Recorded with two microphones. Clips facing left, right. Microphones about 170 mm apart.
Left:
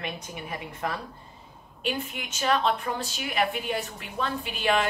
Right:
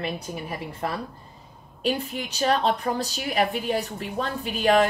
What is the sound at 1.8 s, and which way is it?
A woman's voice, 35° right (ahead or behind).